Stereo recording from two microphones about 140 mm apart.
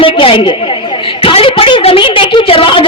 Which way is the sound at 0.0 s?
40° left (ahead or behind).